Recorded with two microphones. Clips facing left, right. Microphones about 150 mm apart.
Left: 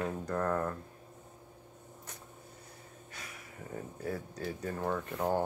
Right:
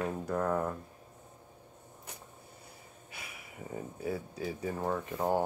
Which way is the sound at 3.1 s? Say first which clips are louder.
Right 1 dB; 10° right (ahead or behind).